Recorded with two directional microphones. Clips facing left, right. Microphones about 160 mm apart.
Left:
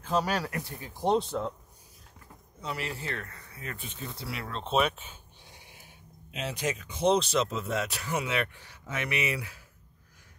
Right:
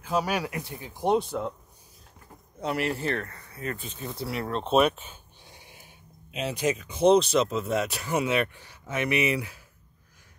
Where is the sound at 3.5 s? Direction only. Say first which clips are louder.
Right 7 dB; 40° right (ahead or behind).